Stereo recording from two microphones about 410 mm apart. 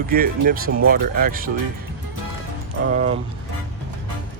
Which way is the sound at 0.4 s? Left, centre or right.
Right.